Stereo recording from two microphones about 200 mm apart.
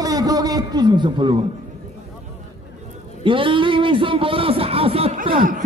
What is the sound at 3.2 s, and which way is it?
A man's voice, 25° right (ahead or behind).